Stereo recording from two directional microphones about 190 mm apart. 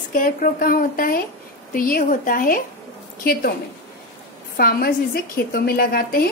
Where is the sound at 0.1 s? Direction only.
50° left (ahead or behind).